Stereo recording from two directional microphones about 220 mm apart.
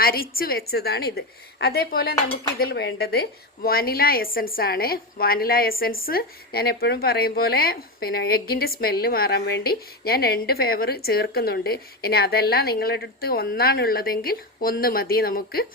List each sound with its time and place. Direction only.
0.0 s a woman's voice: 40° left (ahead or behind)